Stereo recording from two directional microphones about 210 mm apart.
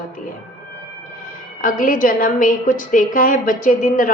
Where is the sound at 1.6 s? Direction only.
40° left (ahead or behind).